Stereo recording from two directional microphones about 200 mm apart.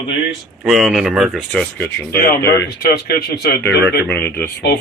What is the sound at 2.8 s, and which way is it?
Speech, 50° left (ahead or behind).